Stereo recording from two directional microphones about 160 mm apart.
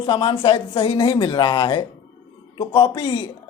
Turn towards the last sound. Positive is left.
turn(degrees=30)  # may be behind; listen again after turning